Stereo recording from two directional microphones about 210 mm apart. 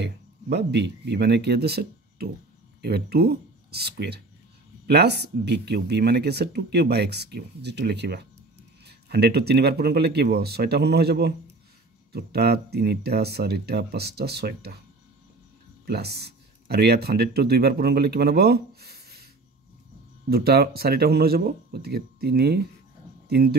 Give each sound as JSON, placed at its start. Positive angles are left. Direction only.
{"t": 0.0, "sound": "speech", "side_deg": -50}
{"t": 15.8, "sound": "speech", "side_deg": -50}
{"t": 20.2, "sound": "speech", "side_deg": -45}